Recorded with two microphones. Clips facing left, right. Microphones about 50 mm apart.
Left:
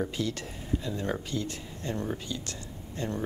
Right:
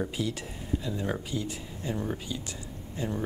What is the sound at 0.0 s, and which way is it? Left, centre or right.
Speech, centre.